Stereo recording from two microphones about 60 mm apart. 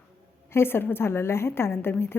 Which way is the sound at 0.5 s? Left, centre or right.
Left.